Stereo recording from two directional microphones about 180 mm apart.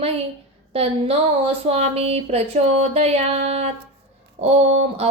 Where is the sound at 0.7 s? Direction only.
35° right (ahead or behind).